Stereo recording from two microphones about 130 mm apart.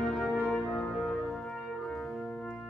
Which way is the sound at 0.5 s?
10° left (ahead or behind).